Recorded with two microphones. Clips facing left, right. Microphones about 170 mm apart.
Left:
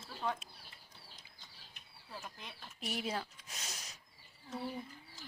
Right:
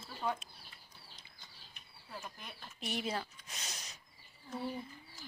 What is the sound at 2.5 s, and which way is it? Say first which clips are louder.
Speech: right 1 dB; centre (ahead or behind).